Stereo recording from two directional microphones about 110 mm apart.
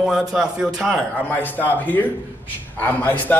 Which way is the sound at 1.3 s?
15° left (ahead or behind).